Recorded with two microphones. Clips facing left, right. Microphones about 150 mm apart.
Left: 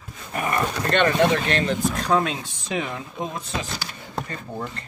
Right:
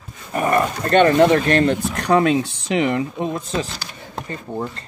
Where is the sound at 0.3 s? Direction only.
40° right (ahead or behind).